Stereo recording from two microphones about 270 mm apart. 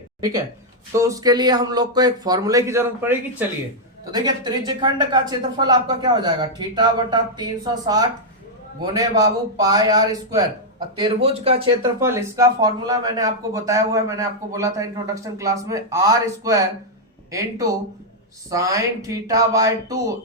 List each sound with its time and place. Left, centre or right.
0.9 s speech: centre
11.9 s speech: centre